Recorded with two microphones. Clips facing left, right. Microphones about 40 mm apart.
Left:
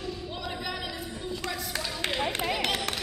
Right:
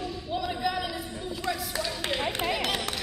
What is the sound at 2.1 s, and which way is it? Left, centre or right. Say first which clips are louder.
Run: right 1 dB; centre.